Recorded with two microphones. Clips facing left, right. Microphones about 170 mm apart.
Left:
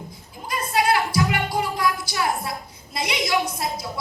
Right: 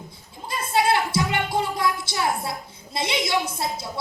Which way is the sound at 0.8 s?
25° right (ahead or behind).